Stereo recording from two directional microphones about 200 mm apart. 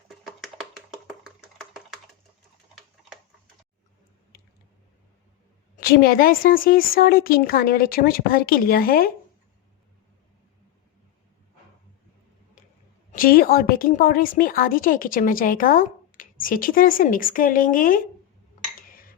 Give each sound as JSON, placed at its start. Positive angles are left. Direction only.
{"t": 5.7, "sound": "a woman's voice", "side_deg": 50}
{"t": 13.1, "sound": "a woman's voice", "side_deg": 45}
{"t": 18.8, "sound": "cutlery", "side_deg": 45}